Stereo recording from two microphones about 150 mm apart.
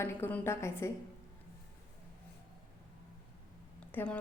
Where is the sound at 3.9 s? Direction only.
10° left (ahead or behind).